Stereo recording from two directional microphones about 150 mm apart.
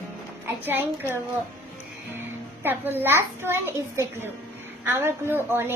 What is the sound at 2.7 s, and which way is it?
A woman's voice, 15° right (ahead or behind).